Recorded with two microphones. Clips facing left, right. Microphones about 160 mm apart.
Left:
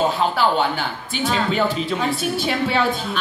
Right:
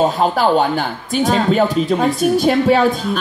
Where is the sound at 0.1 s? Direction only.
40° right (ahead or behind).